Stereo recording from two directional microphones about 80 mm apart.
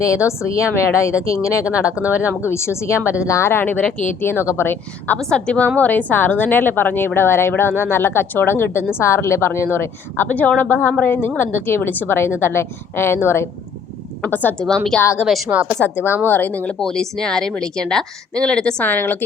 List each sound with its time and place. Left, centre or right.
0.3 s speech: left
1.9 s speech: centre
2.1 s a woman's voice: left
5.2 s a woman's voice: centre; by 13.5 s left
14.2 s a woman's voice: left
14.9 s a woman's voice: centre
15.5 s speech: right
16.2 s a woman's voice: left
16.8 s a woman's voice: centre